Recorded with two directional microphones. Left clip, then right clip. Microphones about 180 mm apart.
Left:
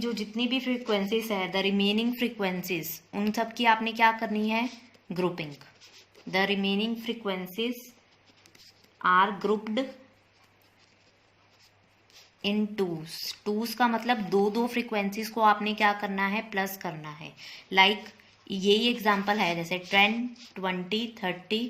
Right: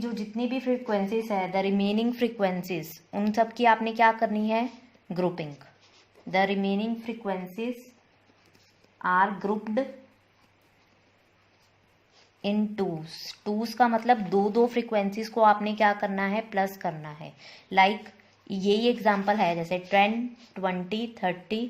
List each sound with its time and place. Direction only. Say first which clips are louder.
0.0 s speech: left 1 dB; 45° right (ahead or behind)
9.0 s speech: left 1 dB; 45° right (ahead or behind)
12.4 s speech: even; 45° right (ahead or behind)